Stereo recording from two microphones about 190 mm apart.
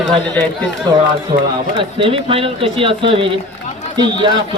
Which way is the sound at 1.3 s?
25° right (ahead or behind).